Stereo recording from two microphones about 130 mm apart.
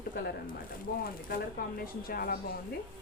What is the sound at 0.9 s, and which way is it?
Speech, 90° left.